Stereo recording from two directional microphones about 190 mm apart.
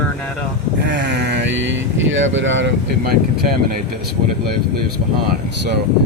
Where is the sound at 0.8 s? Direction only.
70° right (ahead or behind).